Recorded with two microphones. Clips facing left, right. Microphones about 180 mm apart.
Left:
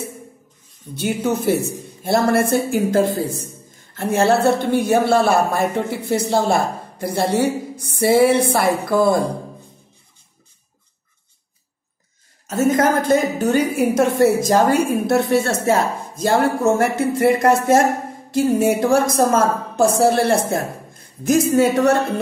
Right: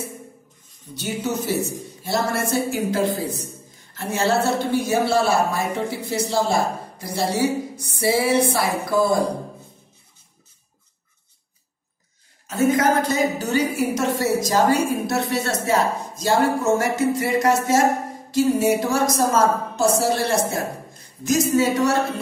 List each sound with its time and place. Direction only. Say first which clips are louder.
0.9 s a woman's voice: left 5 dB; 55° left (ahead or behind)
12.4 s a woman's voice: left 2 dB; 45° left (ahead or behind)